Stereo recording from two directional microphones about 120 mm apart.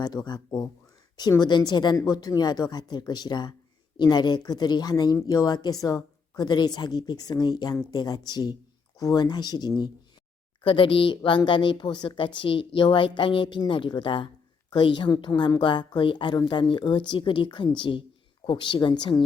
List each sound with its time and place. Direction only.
0.0 s a woman's voice: 35° left (ahead or behind)